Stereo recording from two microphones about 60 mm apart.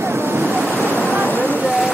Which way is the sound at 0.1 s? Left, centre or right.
Right.